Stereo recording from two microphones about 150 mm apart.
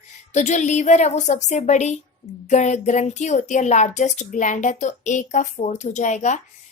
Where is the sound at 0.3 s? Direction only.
50° left (ahead or behind).